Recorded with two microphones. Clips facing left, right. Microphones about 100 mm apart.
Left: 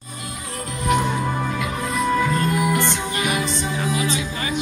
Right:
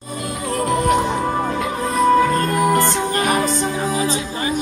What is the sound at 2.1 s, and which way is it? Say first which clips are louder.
Music: right 4 dB; 45° right (ahead or behind).